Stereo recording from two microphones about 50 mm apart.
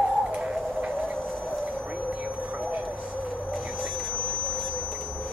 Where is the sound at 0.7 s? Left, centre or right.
Right.